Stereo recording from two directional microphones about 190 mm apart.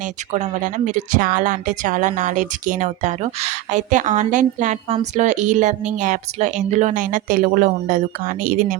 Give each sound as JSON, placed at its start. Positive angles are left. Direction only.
{"t": 0.3, "sound": "a woman's voice", "side_deg": -40}